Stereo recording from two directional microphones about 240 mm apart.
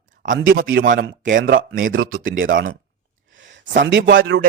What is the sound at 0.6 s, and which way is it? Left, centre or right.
A man's voice, right.